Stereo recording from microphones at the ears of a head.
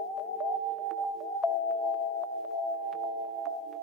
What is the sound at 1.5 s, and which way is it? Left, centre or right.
Music, left.